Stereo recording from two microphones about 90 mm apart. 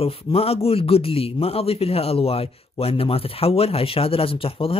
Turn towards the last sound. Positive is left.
turn(degrees=90)